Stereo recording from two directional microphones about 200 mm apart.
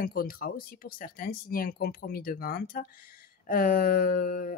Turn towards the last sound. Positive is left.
turn(degrees=45)  # may be behind; listen again after turning